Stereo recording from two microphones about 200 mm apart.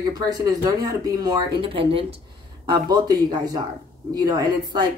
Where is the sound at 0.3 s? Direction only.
20° right (ahead or behind).